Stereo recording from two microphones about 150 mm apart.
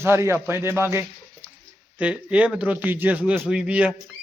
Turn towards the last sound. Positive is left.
turn(degrees=-10)  # may be behind; listen again after turning